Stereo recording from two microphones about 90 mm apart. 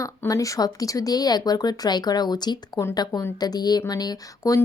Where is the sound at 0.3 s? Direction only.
40° left (ahead or behind).